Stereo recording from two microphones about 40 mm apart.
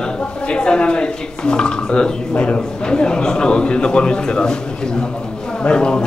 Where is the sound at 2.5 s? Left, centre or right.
Left.